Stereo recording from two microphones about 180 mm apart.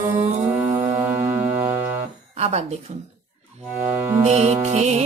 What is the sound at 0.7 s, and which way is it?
Music, 15° right (ahead or behind).